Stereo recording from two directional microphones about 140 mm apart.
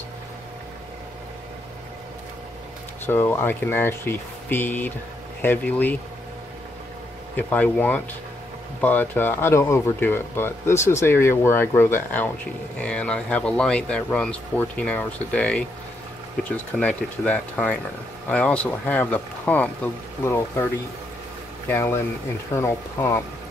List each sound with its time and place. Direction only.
3.1 s speech: 15° left (ahead or behind)
7.3 s speech: 10° left (ahead or behind)
16.7 s speech: 10° left (ahead or behind)
21.6 s speech: 20° left (ahead or behind)